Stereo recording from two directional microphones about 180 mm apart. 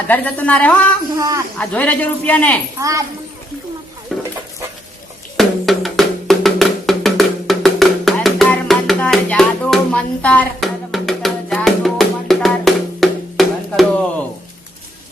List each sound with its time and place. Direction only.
0.1 s a man's voice: 10° left (ahead or behind)
1.1 s a man's voice: 20° right (ahead or behind)
1.5 s a man's voice: 10° left (ahead or behind)
2.7 s a child's voice: 15° right (ahead or behind)
4.1 s chicken: centre (ahead or behind)
5.4 s music: centre (ahead or behind)